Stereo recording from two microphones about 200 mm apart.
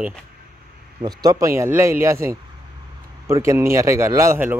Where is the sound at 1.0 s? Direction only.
20° right (ahead or behind).